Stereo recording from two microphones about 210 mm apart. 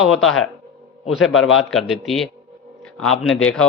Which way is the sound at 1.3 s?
75° left (ahead or behind).